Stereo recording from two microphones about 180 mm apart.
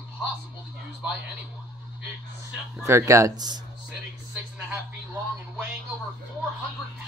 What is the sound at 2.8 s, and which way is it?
Speech, 15° right (ahead or behind).